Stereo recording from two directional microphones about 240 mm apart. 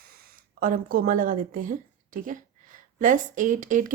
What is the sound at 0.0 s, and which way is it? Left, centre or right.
A woman's voice, right.